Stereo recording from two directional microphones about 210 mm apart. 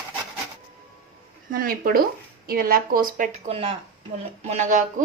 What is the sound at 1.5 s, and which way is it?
Speech, 45° right (ahead or behind).